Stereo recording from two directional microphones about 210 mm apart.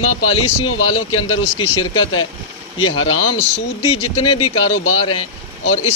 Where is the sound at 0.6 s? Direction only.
85° left.